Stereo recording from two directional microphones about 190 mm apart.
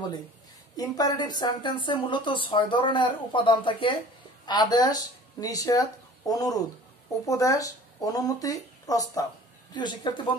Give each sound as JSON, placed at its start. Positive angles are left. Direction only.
{"t": 0.7, "sound": "speech", "side_deg": 20}